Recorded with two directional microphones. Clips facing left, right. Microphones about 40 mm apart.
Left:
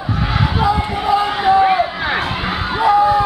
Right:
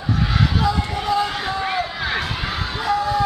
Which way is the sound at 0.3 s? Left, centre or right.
Left.